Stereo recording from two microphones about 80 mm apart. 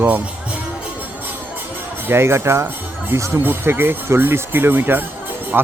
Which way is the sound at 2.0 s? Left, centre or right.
Right.